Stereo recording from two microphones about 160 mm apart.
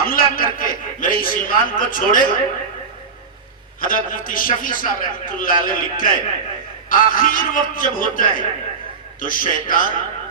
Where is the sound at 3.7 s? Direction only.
60° left (ahead or behind).